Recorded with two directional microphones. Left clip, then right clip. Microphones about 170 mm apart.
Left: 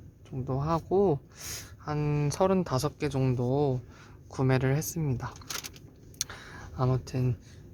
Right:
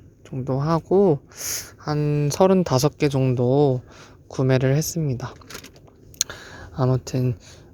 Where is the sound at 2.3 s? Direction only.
30° right (ahead or behind).